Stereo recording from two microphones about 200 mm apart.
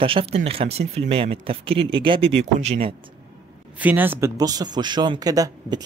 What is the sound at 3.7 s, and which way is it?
Speech, 10° right (ahead or behind).